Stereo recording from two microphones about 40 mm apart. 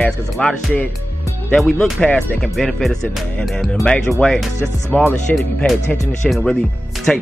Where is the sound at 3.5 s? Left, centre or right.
Centre.